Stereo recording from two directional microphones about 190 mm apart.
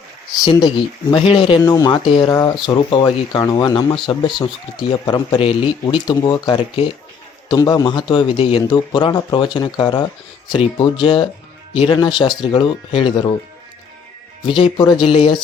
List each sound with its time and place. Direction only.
0.4 s speech: 25° left (ahead or behind)
14.4 s speech: 25° left (ahead or behind)